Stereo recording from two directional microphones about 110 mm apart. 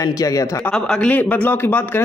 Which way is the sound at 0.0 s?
35° left (ahead or behind).